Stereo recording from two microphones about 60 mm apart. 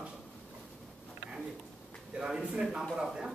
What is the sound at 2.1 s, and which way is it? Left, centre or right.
Speech, centre.